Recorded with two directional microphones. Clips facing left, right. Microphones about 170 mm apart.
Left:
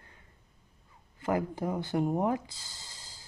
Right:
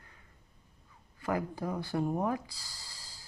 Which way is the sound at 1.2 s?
25° left (ahead or behind).